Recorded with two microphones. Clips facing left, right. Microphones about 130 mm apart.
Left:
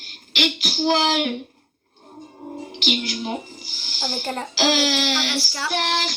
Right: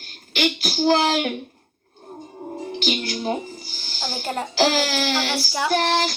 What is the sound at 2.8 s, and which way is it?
Speech, 40° right (ahead or behind).